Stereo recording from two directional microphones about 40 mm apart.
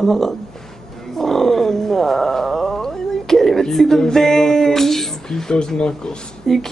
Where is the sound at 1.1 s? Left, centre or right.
Centre.